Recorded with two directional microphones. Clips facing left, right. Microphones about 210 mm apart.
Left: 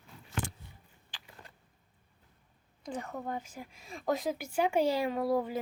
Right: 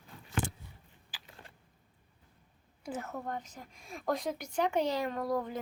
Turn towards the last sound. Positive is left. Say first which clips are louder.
# left 3 dB
turn(degrees=10)  # may be behind; listen again after turning